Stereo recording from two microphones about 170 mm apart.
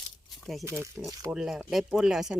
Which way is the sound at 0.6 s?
15° right (ahead or behind).